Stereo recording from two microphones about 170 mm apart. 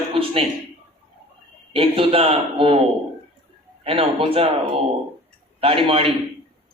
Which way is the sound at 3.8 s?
35° right (ahead or behind).